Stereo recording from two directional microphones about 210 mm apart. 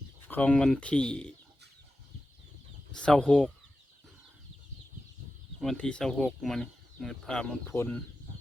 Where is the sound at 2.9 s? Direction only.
5° left (ahead or behind).